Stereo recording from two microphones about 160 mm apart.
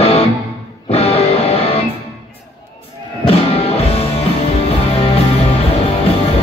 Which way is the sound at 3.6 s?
40° left (ahead or behind).